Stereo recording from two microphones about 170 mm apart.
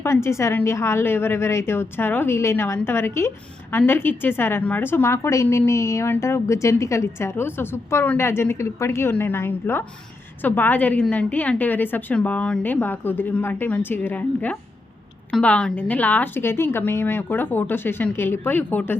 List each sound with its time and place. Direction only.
0.0 s a woman's voice: 15° left (ahead or behind)